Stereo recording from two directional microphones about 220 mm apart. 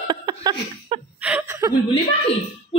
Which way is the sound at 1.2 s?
5° right (ahead or behind).